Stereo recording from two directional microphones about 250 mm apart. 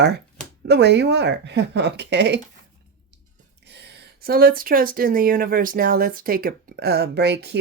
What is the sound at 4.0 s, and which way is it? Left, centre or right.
Speech, right.